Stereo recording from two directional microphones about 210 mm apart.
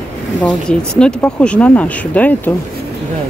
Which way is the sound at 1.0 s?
5° left (ahead or behind).